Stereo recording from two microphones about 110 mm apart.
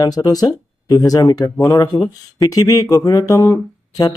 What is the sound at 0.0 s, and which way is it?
Speech, 35° left (ahead or behind).